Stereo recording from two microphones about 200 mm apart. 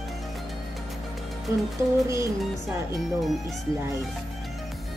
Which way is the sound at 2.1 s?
15° right (ahead or behind).